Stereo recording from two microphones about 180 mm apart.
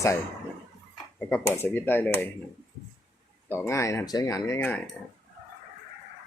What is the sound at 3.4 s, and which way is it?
Speech, 15° left (ahead or behind).